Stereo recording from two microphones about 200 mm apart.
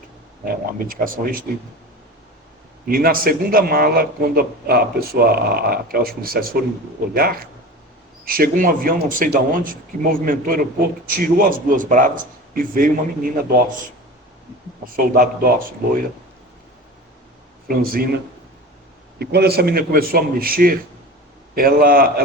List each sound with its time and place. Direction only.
0.5 s a man's voice: 45° right (ahead or behind)
2.8 s a man's voice: 45° right (ahead or behind)
14.8 s a man's voice: 45° right (ahead or behind)
17.7 s a man's voice: 50° right (ahead or behind)
19.2 s a man's voice: 55° right (ahead or behind)